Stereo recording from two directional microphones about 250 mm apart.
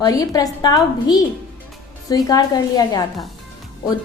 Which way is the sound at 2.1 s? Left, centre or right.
Centre.